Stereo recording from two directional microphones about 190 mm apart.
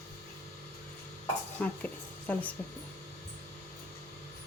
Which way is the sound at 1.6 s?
10° left (ahead or behind).